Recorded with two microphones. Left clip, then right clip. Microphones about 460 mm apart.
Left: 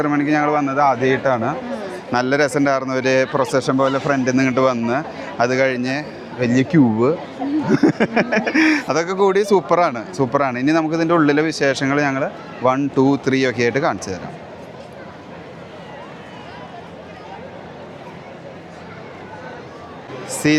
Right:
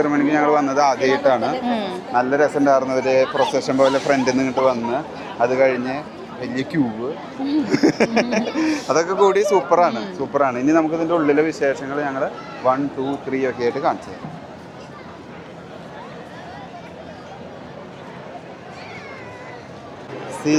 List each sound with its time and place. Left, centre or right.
0.0 s a man's voice: left
2.1 s speech: left
20.4 s speech: left